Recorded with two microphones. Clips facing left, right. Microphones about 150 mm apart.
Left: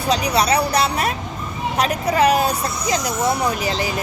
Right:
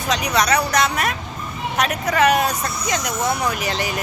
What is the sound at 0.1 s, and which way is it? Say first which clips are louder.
A woman's voice: left 1 dB; 30° left (ahead or behind).